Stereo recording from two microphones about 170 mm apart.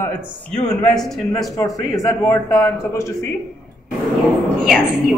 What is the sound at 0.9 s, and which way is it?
Speech, centre (ahead or behind).